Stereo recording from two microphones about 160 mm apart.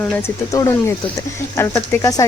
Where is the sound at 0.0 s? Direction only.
15° left (ahead or behind).